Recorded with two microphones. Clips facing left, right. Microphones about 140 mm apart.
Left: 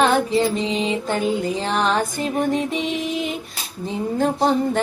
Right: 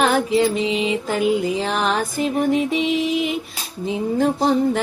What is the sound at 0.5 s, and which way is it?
Mantra, 35° left (ahead or behind).